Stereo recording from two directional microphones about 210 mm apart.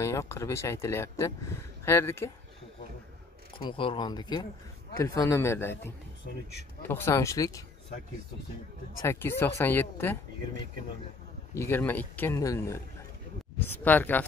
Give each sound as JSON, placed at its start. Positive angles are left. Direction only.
{"t": 0.0, "sound": "speech", "side_deg": 15}
{"t": 3.5, "sound": "speech", "side_deg": 25}
{"t": 6.2, "sound": "speech", "side_deg": 40}
{"t": 6.8, "sound": "speech", "side_deg": 10}
{"t": 9.0, "sound": "speech", "side_deg": 15}
{"t": 11.5, "sound": "speech", "side_deg": 10}